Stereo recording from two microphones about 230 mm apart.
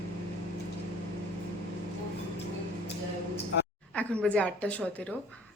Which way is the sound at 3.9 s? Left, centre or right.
Centre.